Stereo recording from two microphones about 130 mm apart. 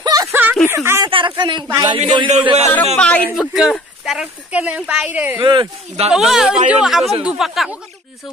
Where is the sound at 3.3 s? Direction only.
Centre (ahead or behind).